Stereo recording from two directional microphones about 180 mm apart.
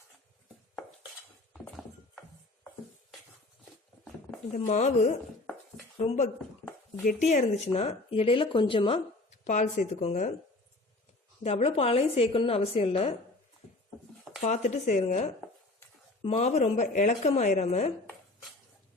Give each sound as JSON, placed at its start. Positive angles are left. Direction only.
{"t": 1.5, "sound": "horse", "side_deg": 5}
{"t": 4.5, "sound": "speech", "side_deg": 40}
{"t": 9.4, "sound": "speech", "side_deg": 40}
{"t": 11.4, "sound": "speech", "side_deg": 35}
{"t": 14.4, "sound": "speech", "side_deg": 40}